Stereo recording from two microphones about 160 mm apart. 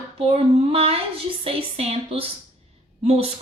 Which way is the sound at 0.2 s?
40° right (ahead or behind).